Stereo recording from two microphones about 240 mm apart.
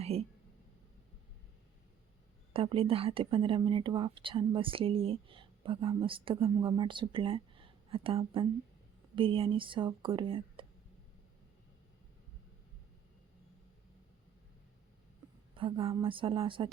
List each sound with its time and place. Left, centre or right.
0.0 s speech: right
2.5 s speech: right
15.5 s speech: right